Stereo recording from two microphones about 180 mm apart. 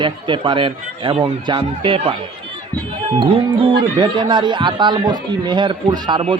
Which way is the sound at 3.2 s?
30° right (ahead or behind).